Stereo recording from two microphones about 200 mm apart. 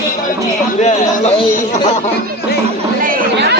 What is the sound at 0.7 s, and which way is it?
Speech, 35° left (ahead or behind).